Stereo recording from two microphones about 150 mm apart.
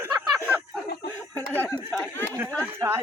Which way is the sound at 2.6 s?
15° right (ahead or behind).